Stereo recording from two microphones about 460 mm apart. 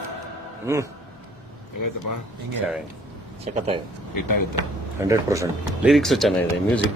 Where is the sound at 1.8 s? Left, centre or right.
Left.